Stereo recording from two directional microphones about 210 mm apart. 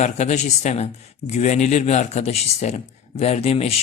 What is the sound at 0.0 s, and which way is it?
Speech, 35° left (ahead or behind).